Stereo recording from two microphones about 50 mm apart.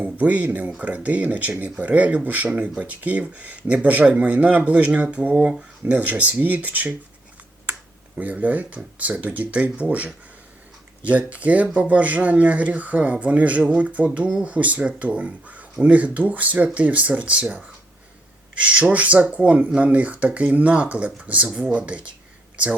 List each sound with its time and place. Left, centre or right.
0.0 s speech: right
8.2 s speech: right
11.3 s speech: right
18.6 s speech: right